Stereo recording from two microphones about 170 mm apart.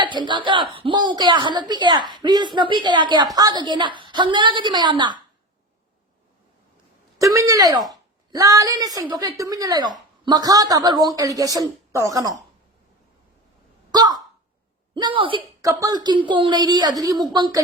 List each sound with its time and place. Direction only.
0.0 s a woman's voice: 25° right (ahead or behind)
7.2 s a woman's voice: 20° right (ahead or behind)
13.9 s a sound: 25° right (ahead or behind)
14.9 s a woman's voice: 30° right (ahead or behind)
15.6 s a woman's voice: 20° right (ahead or behind)